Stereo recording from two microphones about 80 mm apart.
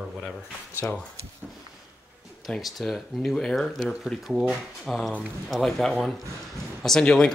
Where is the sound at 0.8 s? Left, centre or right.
Left.